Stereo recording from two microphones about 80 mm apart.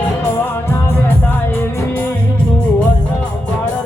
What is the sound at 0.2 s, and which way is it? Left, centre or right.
Music, left.